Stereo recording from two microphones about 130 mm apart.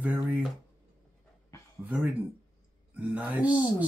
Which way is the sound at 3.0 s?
10° right (ahead or behind).